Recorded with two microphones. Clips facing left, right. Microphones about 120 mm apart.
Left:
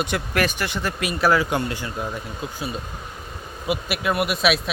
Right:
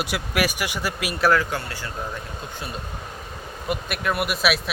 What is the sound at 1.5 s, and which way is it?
Speech, 20° left (ahead or behind).